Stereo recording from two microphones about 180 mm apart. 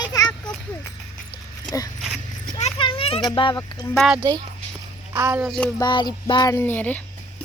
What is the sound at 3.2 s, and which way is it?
Speech, 25° left (ahead or behind).